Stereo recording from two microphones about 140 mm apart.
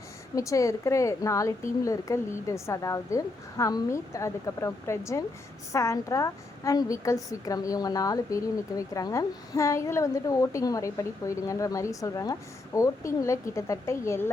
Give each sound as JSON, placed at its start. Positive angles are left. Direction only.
{"t": 0.3, "sound": "a woman's voice", "side_deg": 25}